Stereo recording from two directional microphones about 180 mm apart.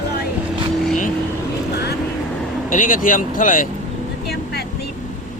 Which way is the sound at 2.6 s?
50° left (ahead or behind).